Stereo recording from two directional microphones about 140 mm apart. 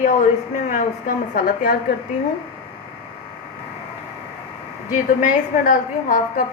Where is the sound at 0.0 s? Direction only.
65° left (ahead or behind); by 1.7 s 90° left.